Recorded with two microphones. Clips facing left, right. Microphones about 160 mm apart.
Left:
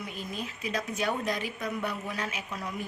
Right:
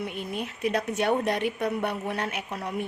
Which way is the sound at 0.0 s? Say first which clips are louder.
Right 5 dB; 65° right (ahead or behind).